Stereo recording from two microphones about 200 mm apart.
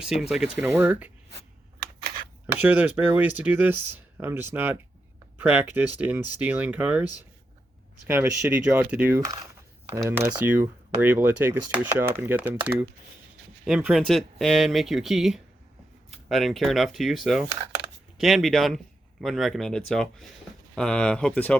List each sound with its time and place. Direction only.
0.0 s speech: centre (ahead or behind)
2.5 s speech: 10° right (ahead or behind)